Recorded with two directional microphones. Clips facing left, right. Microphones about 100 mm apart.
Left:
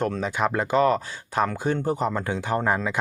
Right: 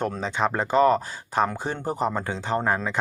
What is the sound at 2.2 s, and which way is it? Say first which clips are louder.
Speech: left 1 dB; 10° left (ahead or behind).